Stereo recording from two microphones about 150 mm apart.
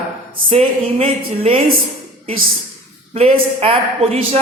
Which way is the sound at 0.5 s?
40° right (ahead or behind).